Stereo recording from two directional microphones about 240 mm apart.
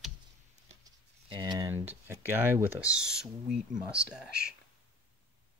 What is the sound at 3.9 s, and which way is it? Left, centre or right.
Speech, centre.